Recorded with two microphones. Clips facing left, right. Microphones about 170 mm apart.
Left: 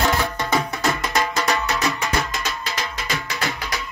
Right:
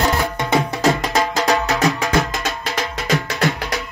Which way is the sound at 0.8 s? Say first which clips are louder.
Right 5 dB; 40° right (ahead or behind).